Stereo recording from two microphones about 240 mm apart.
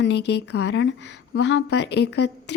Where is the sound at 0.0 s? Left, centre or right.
Left.